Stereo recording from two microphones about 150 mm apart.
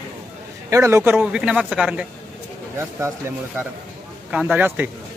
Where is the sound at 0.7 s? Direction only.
20° right (ahead or behind).